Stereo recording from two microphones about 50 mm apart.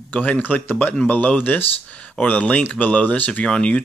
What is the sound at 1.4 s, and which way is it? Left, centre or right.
Speech, left.